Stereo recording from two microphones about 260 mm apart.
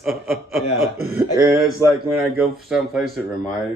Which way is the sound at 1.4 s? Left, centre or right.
Centre.